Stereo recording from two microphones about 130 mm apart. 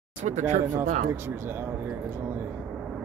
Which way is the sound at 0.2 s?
60° right (ahead or behind).